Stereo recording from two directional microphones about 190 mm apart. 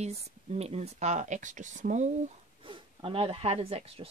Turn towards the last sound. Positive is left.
turn(degrees=-30)  # may be behind; listen again after turning